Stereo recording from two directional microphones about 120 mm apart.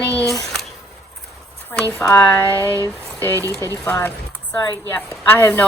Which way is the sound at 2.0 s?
20° left (ahead or behind).